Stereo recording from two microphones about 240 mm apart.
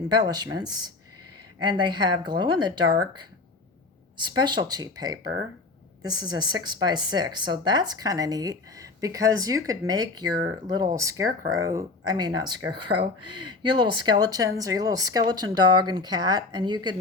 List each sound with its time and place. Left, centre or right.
0.1 s speech: centre